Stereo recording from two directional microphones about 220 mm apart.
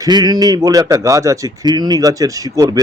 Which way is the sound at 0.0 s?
20° right (ahead or behind).